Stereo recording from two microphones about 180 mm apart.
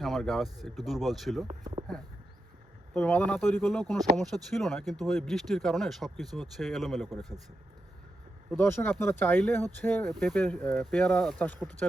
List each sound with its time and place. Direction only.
0.0 s a sound: centre (ahead or behind)
0.6 s speech: centre (ahead or behind)
2.9 s speech: 10° left (ahead or behind)
7.2 s speech: 20° right (ahead or behind)
8.4 s speech: 10° left (ahead or behind)